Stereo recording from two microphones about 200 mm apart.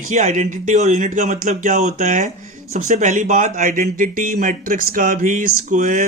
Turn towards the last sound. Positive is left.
turn(degrees=-40)  # may be behind; listen again after turning